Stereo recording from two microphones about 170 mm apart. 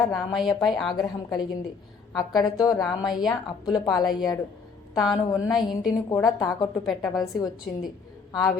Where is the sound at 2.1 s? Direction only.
20° left (ahead or behind).